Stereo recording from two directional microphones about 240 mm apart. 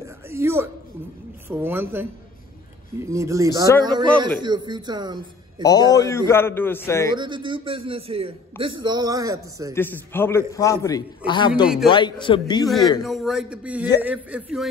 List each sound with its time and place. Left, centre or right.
0.0 s a sound: centre
1.5 s speech: centre
5.6 s a man's voice: centre
7.2 s a man's voice: centre
9.8 s a man's voice: centre
11.6 s a man's voice: centre
11.9 s a man's voice: centre
13.0 s a man's voice: centre